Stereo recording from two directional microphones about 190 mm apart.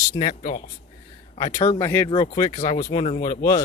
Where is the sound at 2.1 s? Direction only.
25° left (ahead or behind).